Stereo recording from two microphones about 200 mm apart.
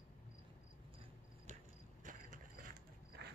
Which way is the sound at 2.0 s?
40° right (ahead or behind).